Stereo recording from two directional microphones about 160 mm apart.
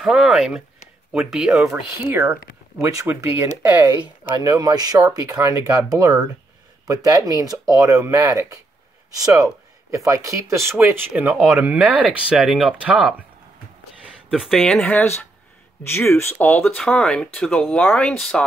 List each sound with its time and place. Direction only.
0.0 s speech: centre (ahead or behind)
2.0 s speech: 15° right (ahead or behind)
14.0 s speech: 5° right (ahead or behind)
16.1 s speech: 15° left (ahead or behind)